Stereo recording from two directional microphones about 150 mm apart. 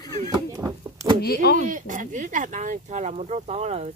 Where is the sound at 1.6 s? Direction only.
55° right (ahead or behind).